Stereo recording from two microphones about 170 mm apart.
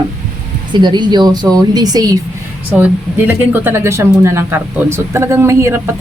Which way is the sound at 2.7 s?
10° right (ahead or behind).